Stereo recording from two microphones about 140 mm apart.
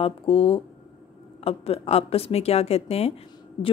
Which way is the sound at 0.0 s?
40° left (ahead or behind).